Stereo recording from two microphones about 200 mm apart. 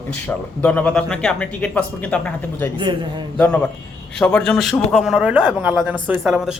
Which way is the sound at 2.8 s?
20° right (ahead or behind).